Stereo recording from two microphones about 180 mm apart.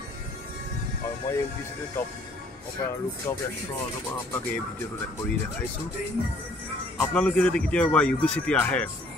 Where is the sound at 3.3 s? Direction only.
15° left (ahead or behind).